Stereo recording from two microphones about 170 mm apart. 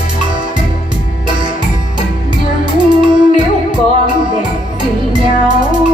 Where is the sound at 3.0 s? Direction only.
25° right (ahead or behind).